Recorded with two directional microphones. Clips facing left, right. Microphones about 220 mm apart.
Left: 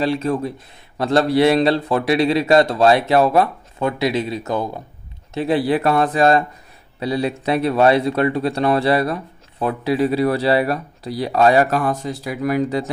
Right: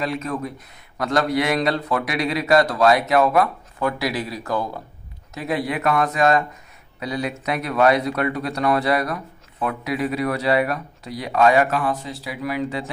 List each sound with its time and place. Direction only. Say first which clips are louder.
0.0 s a man's voice: left 6 dB; 30° left (ahead or behind)